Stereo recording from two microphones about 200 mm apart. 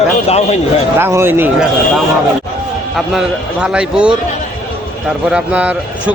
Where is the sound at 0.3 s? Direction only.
30° left (ahead or behind).